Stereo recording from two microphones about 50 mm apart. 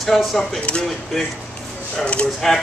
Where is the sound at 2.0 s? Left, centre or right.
Left.